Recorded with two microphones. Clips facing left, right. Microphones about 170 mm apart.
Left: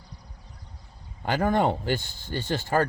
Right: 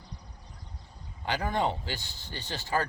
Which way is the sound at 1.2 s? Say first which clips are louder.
Left 6 dB; 50° left (ahead or behind).